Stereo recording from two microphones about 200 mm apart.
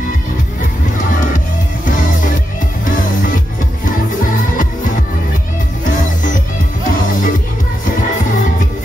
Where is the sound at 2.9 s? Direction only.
40° left (ahead or behind).